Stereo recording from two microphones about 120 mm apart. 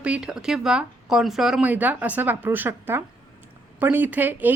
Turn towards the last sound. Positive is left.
turn(degrees=-15)  # may be behind; listen again after turning